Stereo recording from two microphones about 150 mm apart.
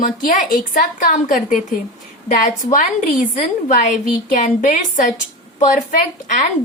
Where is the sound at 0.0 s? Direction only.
65° left (ahead or behind).